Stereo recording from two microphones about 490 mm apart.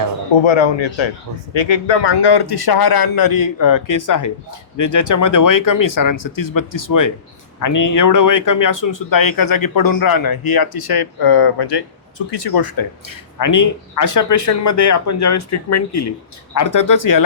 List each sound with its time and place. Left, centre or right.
0.4 s a man's voice: left
13.4 s a man's voice: left